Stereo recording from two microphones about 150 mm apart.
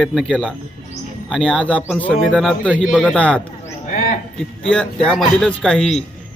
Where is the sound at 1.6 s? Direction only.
10° left (ahead or behind).